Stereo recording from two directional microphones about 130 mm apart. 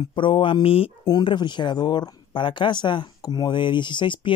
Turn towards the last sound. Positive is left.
turn(degrees=40)  # may be behind; listen again after turning